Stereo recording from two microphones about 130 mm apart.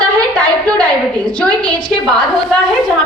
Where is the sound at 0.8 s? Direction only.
10° left (ahead or behind).